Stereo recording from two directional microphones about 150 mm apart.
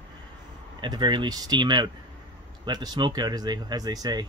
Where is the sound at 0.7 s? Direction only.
30° right (ahead or behind).